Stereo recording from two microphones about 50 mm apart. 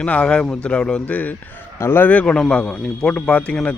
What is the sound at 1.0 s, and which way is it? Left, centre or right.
Speech, left.